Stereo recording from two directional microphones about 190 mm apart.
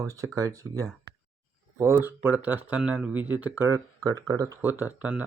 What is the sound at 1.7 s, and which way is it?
Speech, 15° right (ahead or behind).